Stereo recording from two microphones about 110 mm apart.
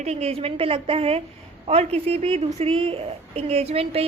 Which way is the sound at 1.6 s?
70° right (ahead or behind).